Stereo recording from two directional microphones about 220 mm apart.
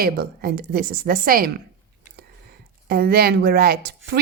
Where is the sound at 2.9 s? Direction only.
45° right (ahead or behind).